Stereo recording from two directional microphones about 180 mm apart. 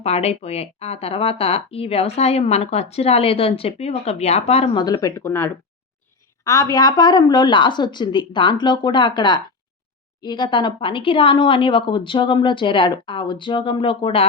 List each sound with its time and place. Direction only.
0.0 s speech: 35° left (ahead or behind)